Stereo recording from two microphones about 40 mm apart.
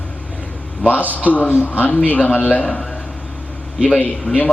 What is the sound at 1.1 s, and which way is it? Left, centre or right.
Speech, left.